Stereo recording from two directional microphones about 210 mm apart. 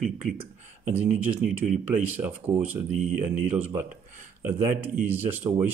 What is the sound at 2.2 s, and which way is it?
Speech, 15° right (ahead or behind).